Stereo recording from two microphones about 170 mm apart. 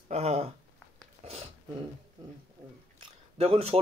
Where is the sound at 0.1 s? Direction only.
40° right (ahead or behind).